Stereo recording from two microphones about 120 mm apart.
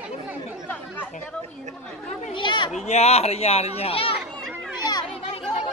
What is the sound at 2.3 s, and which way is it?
Speech, 40° left (ahead or behind).